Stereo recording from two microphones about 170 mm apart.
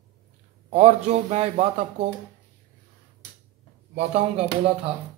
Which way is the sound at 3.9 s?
40° right (ahead or behind).